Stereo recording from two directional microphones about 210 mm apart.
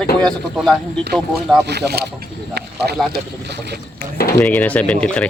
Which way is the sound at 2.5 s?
50° right (ahead or behind).